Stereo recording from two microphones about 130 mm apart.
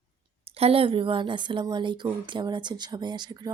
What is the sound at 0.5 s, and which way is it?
Speech, 50° right (ahead or behind).